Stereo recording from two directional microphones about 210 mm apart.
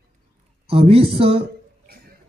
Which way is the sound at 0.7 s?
25° right (ahead or behind).